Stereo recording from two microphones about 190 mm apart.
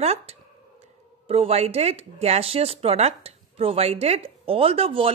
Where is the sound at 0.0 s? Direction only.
35° right (ahead or behind).